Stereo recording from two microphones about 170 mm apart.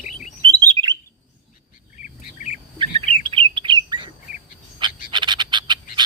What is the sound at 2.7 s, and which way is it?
Bird, 35° right (ahead or behind).